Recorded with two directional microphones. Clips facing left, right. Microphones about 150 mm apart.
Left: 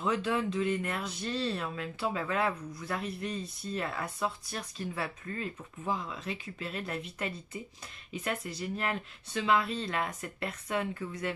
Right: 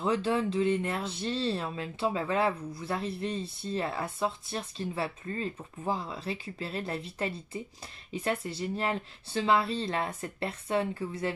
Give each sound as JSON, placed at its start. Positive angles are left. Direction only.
{"t": 0.0, "sound": "speech", "side_deg": -30}